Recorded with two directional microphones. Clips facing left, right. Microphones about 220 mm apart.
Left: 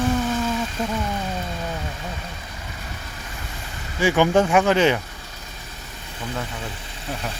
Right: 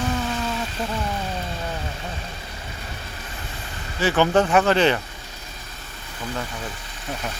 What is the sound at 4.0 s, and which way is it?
Speech, 10° left (ahead or behind).